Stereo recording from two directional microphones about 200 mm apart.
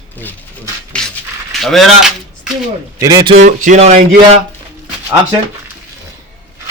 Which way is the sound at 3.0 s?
15° right (ahead or behind).